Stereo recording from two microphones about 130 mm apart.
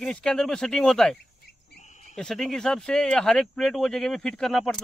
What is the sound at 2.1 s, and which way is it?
Speech, 5° left (ahead or behind).